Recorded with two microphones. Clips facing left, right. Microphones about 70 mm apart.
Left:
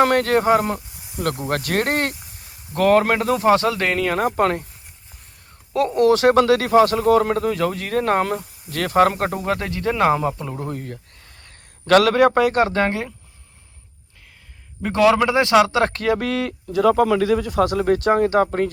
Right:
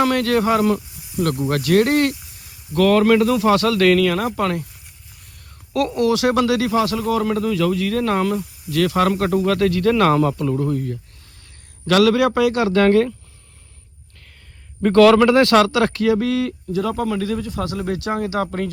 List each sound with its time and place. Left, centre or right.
0.0 s speech: left
0.9 s a sound: left
1.5 s speech: left
4.2 s speech: left
5.7 s speech: left
10.7 s speech: left
12.8 s speech: centre
14.8 s a man's voice: centre; by 16.4 s left
17.5 s speech: left
17.7 s speech: left